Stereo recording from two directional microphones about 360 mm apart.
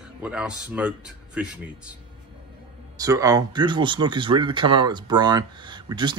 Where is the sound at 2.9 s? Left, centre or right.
Centre.